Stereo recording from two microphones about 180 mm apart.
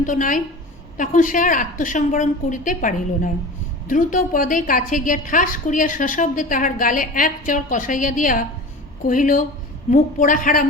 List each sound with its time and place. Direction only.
0.0 s a woman's voice: 45° left (ahead or behind)